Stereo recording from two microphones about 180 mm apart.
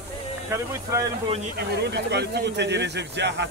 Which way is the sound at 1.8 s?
70° right (ahead or behind).